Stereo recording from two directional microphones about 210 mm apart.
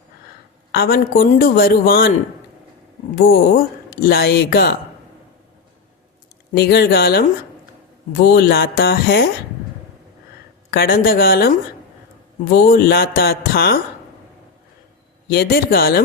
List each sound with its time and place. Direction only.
0.7 s speech: 45° left (ahead or behind)
3.2 s speech: 45° left (ahead or behind)
6.5 s speech: 50° left (ahead or behind)
10.7 s speech: 45° left (ahead or behind)
15.3 s speech: 50° left (ahead or behind)